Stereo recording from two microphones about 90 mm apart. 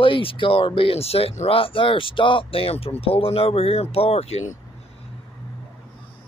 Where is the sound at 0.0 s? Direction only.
80° left.